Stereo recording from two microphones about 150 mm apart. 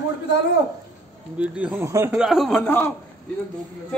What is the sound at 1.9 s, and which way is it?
Speech, 20° right (ahead or behind).